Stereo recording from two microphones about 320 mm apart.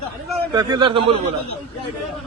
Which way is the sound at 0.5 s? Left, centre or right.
Centre.